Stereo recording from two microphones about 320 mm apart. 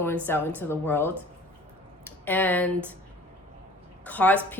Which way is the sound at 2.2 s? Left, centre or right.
Centre.